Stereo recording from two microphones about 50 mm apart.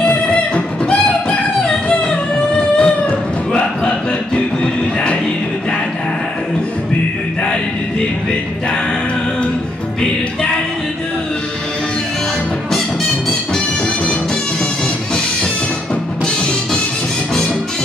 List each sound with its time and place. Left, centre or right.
0.0 s music: centre
1.7 s music: centre
2.8 s chicken: centre